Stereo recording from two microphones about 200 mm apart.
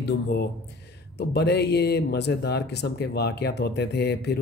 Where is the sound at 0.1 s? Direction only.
55° left (ahead or behind).